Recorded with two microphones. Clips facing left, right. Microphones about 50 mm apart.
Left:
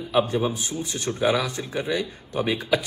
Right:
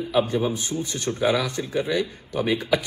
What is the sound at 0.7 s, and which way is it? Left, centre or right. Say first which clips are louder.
Speech: right 2 dB; right.